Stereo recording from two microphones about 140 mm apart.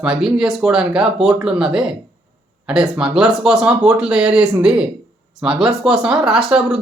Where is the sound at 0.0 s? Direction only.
5° right (ahead or behind).